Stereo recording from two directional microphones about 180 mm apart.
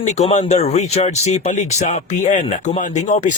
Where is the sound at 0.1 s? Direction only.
40° left (ahead or behind).